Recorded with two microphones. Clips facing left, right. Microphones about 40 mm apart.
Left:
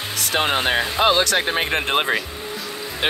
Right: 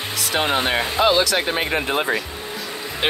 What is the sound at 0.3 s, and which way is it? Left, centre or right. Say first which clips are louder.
Speech: even; left.